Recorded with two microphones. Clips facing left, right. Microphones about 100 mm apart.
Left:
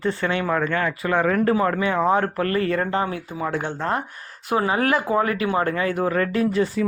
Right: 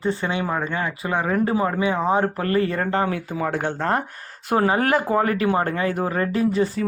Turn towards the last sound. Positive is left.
turn(degrees=-25)  # may be behind; listen again after turning